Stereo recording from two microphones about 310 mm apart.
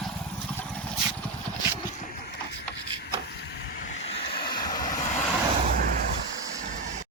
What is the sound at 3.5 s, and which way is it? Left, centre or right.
Vehicle, left.